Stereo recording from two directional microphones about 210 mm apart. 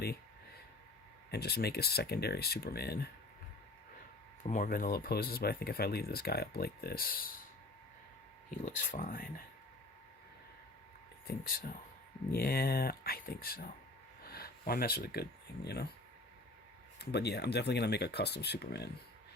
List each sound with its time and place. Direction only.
1.3 s speech: 50° left (ahead or behind)
4.4 s speech: 40° left (ahead or behind)
8.4 s speech: 40° left (ahead or behind)
11.3 s speech: 45° left (ahead or behind)
17.0 s speech: 50° left (ahead or behind)